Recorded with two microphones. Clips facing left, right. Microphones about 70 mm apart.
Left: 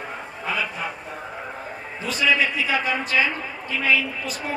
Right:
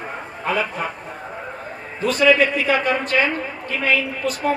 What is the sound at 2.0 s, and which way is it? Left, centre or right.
A woman's voice, right.